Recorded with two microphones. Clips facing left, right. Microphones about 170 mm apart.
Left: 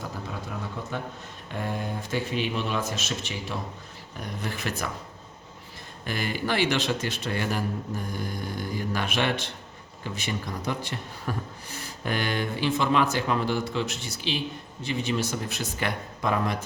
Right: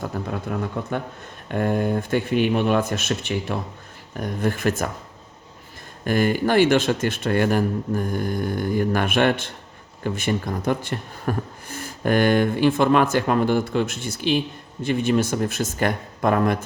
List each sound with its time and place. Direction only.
0.3 s speech: 55° right (ahead or behind)
6.1 s speech: 50° right (ahead or behind)